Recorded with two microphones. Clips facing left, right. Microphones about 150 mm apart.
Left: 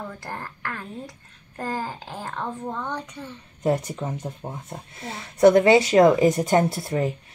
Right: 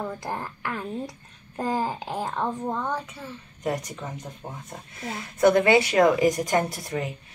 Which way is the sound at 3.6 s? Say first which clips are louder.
Left 5 dB; 30° left (ahead or behind).